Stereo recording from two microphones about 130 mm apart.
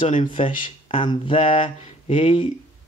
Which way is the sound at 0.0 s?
40° left (ahead or behind).